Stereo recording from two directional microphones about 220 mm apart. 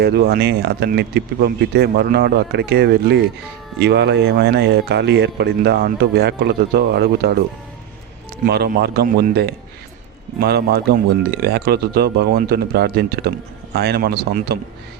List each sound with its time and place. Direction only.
0.0 s speech: 45° right (ahead or behind)
8.4 s speech: 45° right (ahead or behind)